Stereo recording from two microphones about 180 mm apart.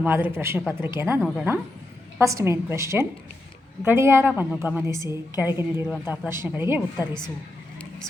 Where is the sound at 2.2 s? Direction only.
15° right (ahead or behind).